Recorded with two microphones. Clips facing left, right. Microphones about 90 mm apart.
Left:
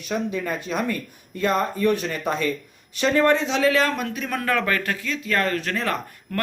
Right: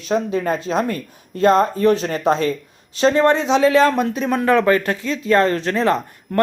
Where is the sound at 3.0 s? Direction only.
25° right (ahead or behind).